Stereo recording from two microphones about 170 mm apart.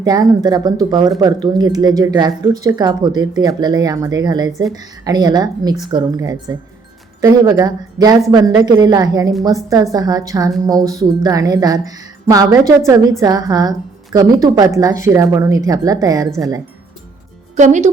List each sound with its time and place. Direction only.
0.0 s speech: 20° right (ahead or behind)
17.6 s speech: 45° right (ahead or behind)